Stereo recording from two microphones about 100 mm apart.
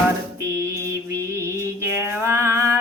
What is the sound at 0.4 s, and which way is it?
Mantra, 30° right (ahead or behind).